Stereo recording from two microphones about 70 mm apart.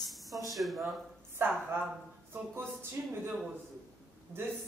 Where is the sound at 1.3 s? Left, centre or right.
Right.